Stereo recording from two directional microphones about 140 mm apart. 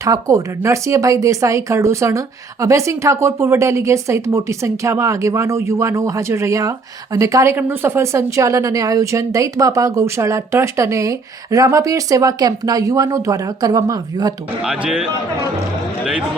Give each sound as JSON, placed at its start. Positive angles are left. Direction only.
{"t": 0.0, "sound": "speech", "side_deg": -25}
{"t": 14.6, "sound": "speech", "side_deg": -5}